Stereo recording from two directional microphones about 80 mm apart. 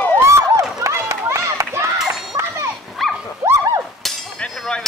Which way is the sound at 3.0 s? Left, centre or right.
Centre.